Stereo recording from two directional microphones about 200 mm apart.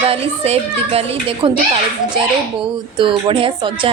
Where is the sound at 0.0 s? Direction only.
30° right (ahead or behind).